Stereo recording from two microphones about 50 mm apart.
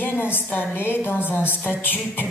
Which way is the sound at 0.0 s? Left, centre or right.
Left.